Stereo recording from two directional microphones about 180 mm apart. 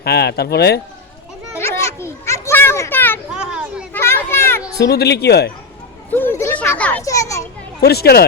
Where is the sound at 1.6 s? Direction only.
15° left (ahead or behind).